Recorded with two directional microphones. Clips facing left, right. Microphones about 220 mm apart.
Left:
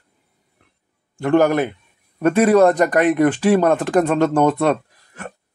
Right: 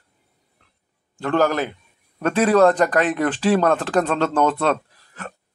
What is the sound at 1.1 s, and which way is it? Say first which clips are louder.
A man's voice: left 4 dB; 15° left (ahead or behind).